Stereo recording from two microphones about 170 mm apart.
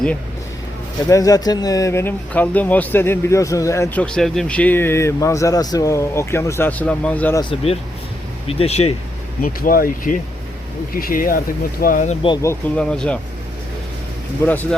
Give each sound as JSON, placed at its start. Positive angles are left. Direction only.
{"t": 1.1, "sound": "speech", "side_deg": 20}
{"t": 4.0, "sound": "speech", "side_deg": 5}
{"t": 7.5, "sound": "speech", "side_deg": 35}
{"t": 9.4, "sound": "speech", "side_deg": 55}
{"t": 12.4, "sound": "speech", "side_deg": 15}
{"t": 14.4, "sound": "speech", "side_deg": 10}